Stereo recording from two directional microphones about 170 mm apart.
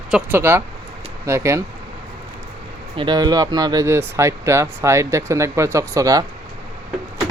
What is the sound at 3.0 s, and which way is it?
Speech, 25° right (ahead or behind).